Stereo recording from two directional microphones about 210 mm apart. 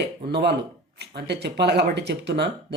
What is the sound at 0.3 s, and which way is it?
Speech, 55° right (ahead or behind).